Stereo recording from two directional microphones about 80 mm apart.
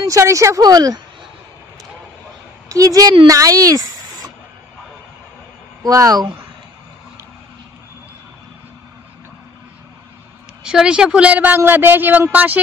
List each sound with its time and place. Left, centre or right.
0.0 s speech: right
0.6 s speech: right
2.7 s speech: right
5.9 s speech: right
10.6 s a woman's voice: centre